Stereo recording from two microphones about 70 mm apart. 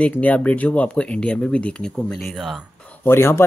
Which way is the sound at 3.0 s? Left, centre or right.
Left.